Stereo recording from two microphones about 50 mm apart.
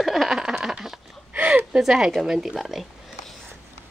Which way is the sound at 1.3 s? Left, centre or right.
Right.